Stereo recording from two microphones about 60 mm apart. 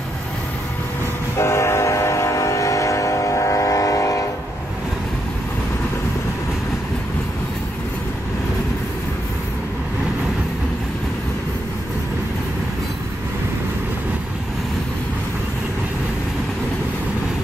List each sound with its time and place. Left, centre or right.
1.4 s train: left